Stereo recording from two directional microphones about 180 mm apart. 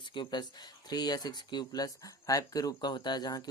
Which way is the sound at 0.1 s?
25° left (ahead or behind).